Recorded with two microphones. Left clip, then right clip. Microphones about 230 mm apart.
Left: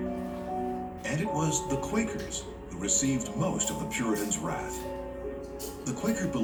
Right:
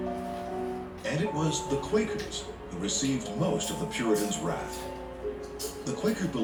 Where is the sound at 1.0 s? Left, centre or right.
Left.